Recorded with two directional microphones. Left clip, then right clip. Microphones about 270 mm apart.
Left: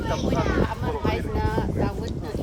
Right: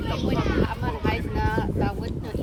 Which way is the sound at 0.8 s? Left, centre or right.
Centre.